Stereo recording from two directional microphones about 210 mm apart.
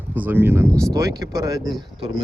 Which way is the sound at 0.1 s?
10° right (ahead or behind).